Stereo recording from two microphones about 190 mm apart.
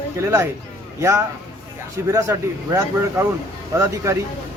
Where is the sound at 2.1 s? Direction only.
15° right (ahead or behind).